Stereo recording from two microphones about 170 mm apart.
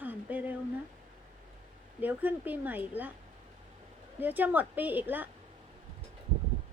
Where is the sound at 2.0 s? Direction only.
10° right (ahead or behind).